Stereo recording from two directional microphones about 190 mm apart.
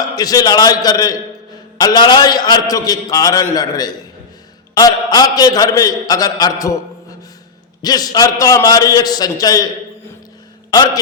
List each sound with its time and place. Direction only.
0.2 s a man's voice: 20° left (ahead or behind)
7.8 s a man's voice: 20° left (ahead or behind)
10.7 s a man's voice: 20° left (ahead or behind)